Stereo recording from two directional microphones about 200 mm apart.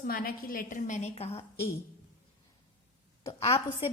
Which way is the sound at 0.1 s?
45° left (ahead or behind).